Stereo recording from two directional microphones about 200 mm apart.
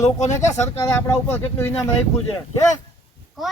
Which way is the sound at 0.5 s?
35° left (ahead or behind).